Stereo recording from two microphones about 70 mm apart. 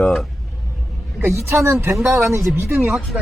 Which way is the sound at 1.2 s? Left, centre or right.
Right.